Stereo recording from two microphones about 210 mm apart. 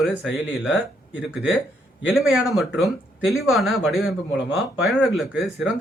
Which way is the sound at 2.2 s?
Centre (ahead or behind).